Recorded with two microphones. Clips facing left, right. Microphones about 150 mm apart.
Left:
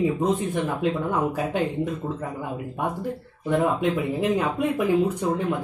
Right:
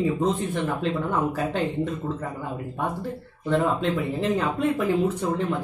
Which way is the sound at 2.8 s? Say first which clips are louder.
Left 1 dB; 15° left (ahead or behind).